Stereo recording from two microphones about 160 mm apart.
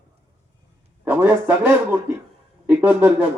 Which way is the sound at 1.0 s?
10° right (ahead or behind).